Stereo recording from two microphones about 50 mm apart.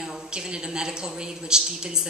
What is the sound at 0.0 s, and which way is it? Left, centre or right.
A woman's voice, centre.